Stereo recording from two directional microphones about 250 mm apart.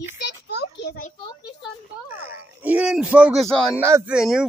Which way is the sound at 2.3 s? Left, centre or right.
Centre.